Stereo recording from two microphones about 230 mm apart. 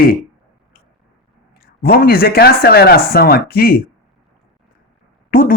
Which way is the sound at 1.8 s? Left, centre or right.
Left.